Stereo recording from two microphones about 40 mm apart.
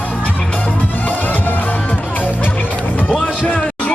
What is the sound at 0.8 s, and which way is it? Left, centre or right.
Music, left.